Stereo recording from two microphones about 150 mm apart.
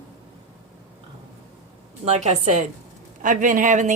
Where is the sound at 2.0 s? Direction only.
45° right (ahead or behind).